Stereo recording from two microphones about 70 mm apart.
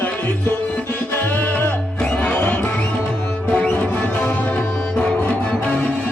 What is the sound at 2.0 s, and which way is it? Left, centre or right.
Music, centre.